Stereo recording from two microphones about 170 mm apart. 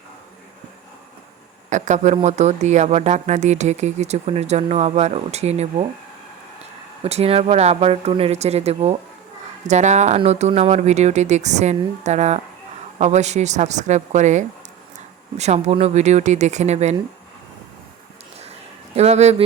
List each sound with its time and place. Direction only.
1.7 s speech: 45° right (ahead or behind)
7.0 s speech: 35° right (ahead or behind)
18.9 s speech: 40° right (ahead or behind)